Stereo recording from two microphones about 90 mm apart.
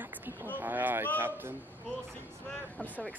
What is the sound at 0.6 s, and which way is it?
Speech, 20° right (ahead or behind).